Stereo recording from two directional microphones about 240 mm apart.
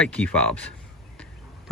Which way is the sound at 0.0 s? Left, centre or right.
Centre.